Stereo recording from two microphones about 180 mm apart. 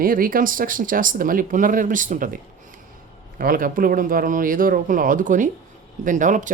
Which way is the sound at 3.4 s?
55° right (ahead or behind).